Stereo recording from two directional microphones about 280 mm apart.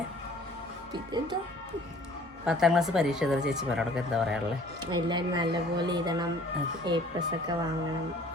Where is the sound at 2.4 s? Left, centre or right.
Centre.